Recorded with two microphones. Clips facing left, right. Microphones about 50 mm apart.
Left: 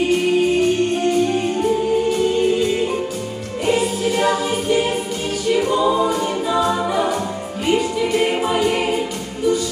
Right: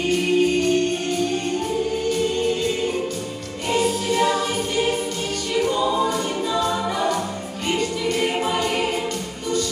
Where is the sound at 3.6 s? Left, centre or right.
Centre.